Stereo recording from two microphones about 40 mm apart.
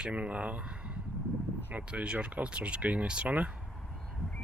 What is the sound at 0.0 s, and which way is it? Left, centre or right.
Speech, right.